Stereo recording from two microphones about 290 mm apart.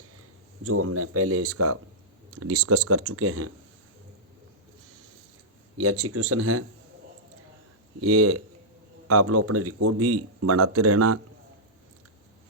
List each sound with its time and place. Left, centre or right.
0.2 s speech: right
5.7 s speech: right
8.0 s speech: right